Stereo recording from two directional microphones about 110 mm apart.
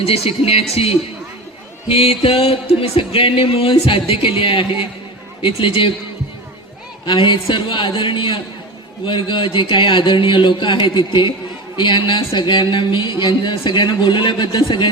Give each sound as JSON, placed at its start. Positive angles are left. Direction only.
{"t": 0.0, "sound": "a sound", "side_deg": 60}
{"t": 5.4, "sound": "speech", "side_deg": 50}
{"t": 7.0, "sound": "speech", "side_deg": 50}